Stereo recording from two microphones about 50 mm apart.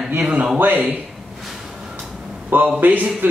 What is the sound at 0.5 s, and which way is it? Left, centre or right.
Speech, right.